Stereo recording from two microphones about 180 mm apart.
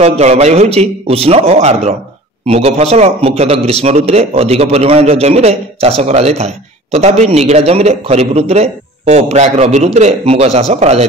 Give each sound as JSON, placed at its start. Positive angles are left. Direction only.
{"t": 0.0, "sound": "a man's voice", "side_deg": -35}